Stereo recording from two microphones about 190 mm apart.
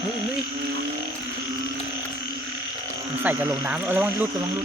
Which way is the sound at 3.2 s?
15° right (ahead or behind).